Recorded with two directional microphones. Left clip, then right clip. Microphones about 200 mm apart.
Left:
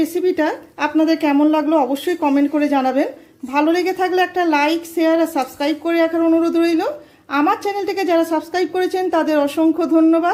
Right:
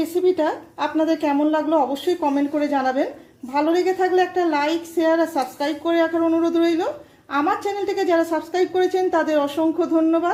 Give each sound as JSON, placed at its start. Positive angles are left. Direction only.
{"t": 0.2, "sound": "a woman's voice", "side_deg": 25}